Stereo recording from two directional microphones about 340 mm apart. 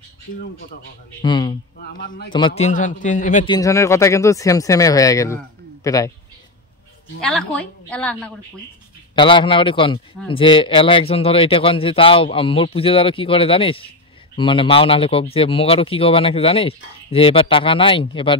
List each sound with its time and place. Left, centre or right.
1.2 s a man's voice: centre
2.0 s a man's voice: left; by 6.1 s centre
7.2 s a woman's voice: centre
9.1 s a man's voice: centre